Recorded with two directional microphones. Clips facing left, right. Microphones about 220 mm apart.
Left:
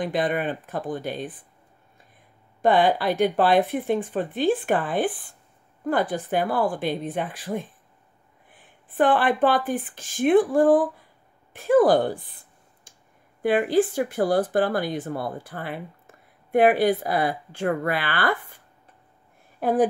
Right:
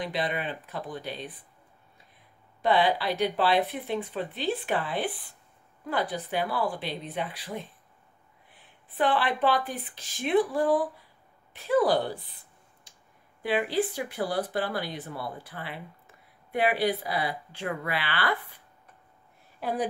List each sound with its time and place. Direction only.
0.0 s speech: 50° left (ahead or behind)
2.6 s speech: 50° left (ahead or behind)
12.9 s clicking: 50° left (ahead or behind)
13.4 s speech: 50° left (ahead or behind)
19.6 s speech: 50° left (ahead or behind)